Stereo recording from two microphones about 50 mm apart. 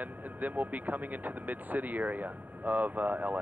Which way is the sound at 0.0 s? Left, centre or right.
Right.